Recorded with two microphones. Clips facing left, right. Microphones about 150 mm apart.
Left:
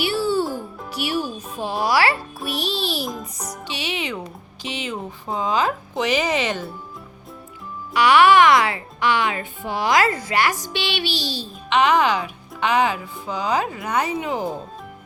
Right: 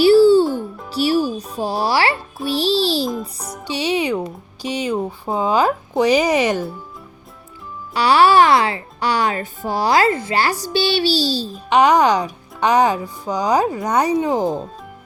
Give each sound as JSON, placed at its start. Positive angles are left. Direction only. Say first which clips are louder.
{"t": 0.0, "sound": "music", "louder": "right 11 dB", "side_deg": -30}
{"t": 0.4, "sound": "music", "louder": "right 6 dB", "side_deg": 0}
{"t": 0.9, "sound": "music", "louder": "right 8 dB", "side_deg": -35}
{"t": 1.5, "sound": "a child's voice", "louder": "right 1 dB", "side_deg": -35}
{"t": 3.1, "sound": "music", "louder": "right 5 dB", "side_deg": -5}
{"t": 4.6, "sound": "speech", "louder": "right 8 dB", "side_deg": -40}
{"t": 6.3, "sound": "speech", "louder": "right 6 dB", "side_deg": -10}
{"t": 7.9, "sound": "speech", "louder": "right 1 dB", "side_deg": -35}